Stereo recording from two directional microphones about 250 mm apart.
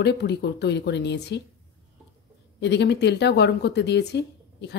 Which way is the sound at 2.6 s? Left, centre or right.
Left.